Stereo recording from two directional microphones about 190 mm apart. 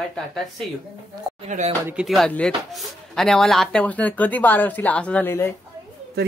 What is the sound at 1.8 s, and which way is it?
Speech, 5° right (ahead or behind).